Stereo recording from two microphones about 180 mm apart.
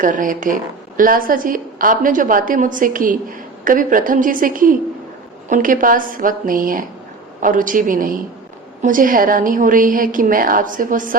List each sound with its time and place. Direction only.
0.0 s a woman's voice: 45° right (ahead or behind)